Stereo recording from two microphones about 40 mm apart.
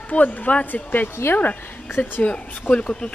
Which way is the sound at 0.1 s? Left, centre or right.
Left.